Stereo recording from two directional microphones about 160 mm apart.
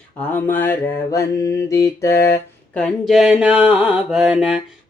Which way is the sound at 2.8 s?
Centre (ahead or behind).